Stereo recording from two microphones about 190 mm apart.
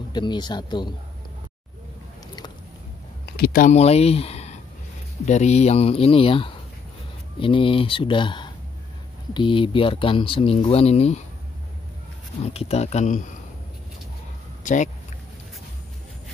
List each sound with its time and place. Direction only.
0.1 s speech: 25° left (ahead or behind)
3.3 s speech: 50° left (ahead or behind)
12.5 s speech: 35° left (ahead or behind)
14.6 s speech: 40° left (ahead or behind)